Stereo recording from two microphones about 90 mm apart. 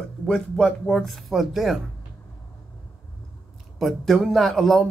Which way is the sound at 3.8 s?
Centre (ahead or behind).